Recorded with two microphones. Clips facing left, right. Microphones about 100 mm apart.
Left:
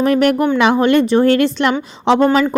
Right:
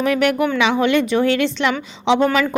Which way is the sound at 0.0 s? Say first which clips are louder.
Left 4 dB; 40° left (ahead or behind).